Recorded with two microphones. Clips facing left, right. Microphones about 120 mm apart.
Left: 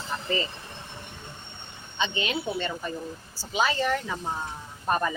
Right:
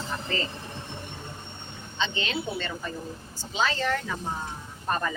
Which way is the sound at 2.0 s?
15° left (ahead or behind).